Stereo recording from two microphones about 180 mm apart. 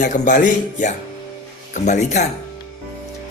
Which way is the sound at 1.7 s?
40° left (ahead or behind).